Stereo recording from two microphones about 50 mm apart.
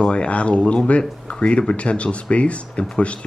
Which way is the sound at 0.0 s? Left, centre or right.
Left.